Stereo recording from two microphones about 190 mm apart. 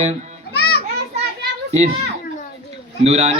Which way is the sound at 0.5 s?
55° left (ahead or behind).